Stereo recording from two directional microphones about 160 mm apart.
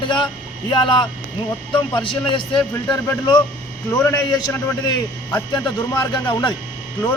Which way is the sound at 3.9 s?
15° left (ahead or behind).